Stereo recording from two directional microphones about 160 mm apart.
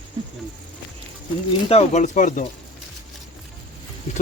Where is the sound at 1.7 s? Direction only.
45° left (ahead or behind).